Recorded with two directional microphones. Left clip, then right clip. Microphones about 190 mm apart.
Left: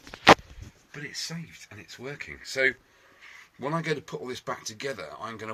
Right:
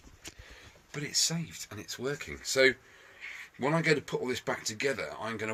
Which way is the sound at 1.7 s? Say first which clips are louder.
Right 4 dB; 20° right (ahead or behind).